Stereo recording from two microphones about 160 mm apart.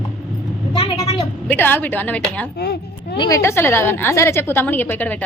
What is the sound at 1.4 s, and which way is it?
A woman's voice, 10° left (ahead or behind).